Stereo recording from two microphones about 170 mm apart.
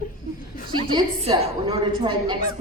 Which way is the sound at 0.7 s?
30° right (ahead or behind).